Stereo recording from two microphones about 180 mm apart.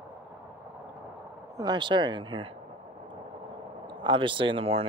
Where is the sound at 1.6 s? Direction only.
25° right (ahead or behind).